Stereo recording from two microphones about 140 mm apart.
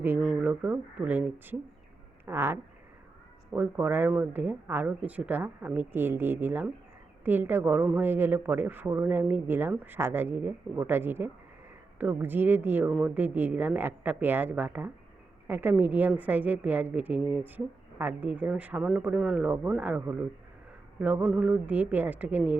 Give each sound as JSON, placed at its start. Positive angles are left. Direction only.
{"t": 0.2, "sound": "speech", "side_deg": -5}